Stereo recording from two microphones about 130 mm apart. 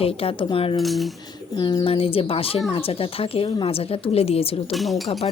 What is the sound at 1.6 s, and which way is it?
Speech, 35° left (ahead or behind).